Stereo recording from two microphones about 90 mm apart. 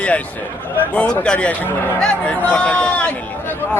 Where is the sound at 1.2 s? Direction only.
10° left (ahead or behind).